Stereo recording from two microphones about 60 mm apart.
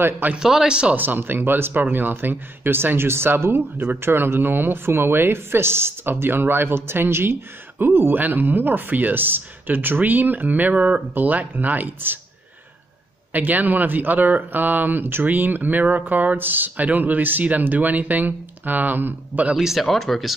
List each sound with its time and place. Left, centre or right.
0.4 s speech: centre
0.9 s speech: right
13.3 s speech: right
19.5 s speech: centre